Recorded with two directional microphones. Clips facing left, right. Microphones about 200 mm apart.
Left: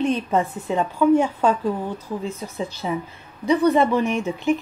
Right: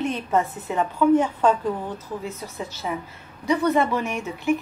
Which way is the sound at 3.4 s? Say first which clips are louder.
Left 3 dB; 20° left (ahead or behind).